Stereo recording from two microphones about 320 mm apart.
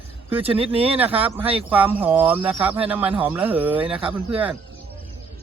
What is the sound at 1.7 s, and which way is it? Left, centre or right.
Speech, centre.